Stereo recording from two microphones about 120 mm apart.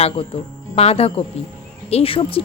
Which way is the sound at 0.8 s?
55° left (ahead or behind).